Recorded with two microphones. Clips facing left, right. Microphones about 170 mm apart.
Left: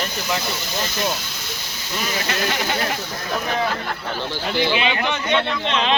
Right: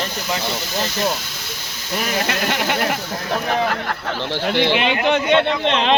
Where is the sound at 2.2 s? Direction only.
60° right (ahead or behind).